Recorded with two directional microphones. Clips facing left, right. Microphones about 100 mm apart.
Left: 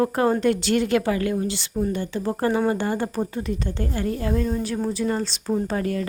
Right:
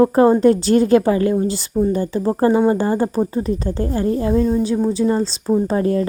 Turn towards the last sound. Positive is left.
turn(degrees=-30)  # may be behind; listen again after turning